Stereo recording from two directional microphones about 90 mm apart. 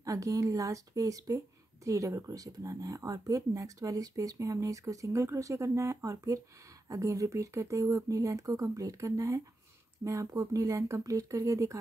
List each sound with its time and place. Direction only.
0.0 s speech: 40° right (ahead or behind)